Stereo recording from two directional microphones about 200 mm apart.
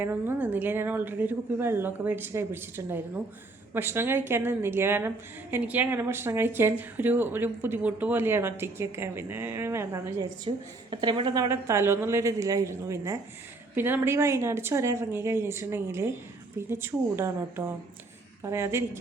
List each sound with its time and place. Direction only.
0.0 s a woman's voice: 10° right (ahead or behind)
10.5 s a woman's voice: 25° right (ahead or behind)